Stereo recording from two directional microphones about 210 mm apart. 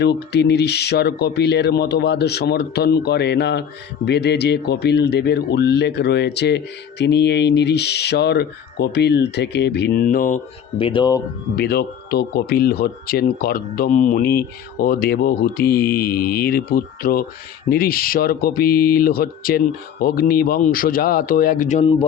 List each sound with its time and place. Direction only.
0.0 s speech: 50° left (ahead or behind)
10.8 s speech: 25° left (ahead or behind)
11.5 s speech: 50° left (ahead or behind); by 22.0 s 30° left (ahead or behind)